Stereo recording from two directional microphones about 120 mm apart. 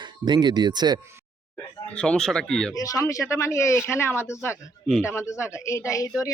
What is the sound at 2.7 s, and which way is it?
Speech, 30° left (ahead or behind).